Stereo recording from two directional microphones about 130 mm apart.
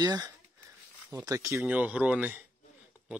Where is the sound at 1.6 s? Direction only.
10° right (ahead or behind).